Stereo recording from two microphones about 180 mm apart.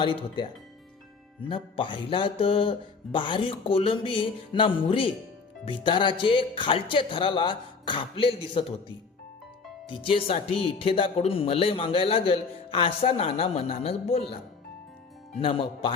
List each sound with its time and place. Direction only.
0.0 s speech: 25° left (ahead or behind)
9.9 s speech: 30° left (ahead or behind)
15.4 s speech: 30° left (ahead or behind)